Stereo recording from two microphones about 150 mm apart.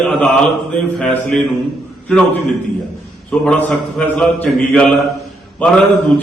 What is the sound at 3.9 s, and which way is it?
Mantra, 10° left (ahead or behind).